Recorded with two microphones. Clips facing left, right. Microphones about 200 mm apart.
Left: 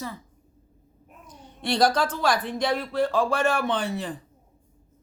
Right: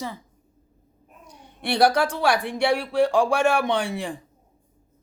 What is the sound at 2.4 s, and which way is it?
Speech, 10° right (ahead or behind).